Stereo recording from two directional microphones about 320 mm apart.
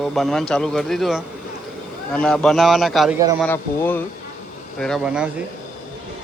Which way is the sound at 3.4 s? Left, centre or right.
Centre.